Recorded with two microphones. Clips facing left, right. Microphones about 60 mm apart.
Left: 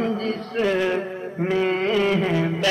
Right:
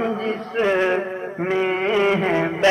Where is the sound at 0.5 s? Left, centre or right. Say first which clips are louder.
Right 3 dB; right.